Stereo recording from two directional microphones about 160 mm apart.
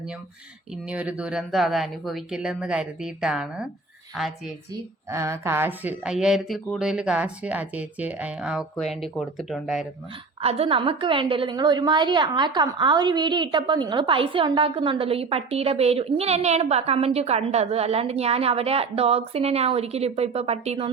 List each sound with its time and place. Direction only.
0.9 s speech: 10° right (ahead or behind)
4.7 s a woman's voice: 20° right (ahead or behind); by 9.8 s centre (ahead or behind)
10.4 s a woman's voice: 40° right (ahead or behind)